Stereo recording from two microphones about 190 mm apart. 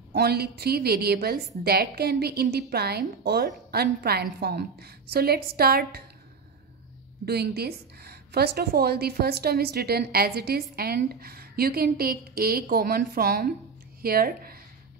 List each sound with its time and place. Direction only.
0.1 s a woman's voice: 55° right (ahead or behind)
7.2 s a woman's voice: 55° right (ahead or behind)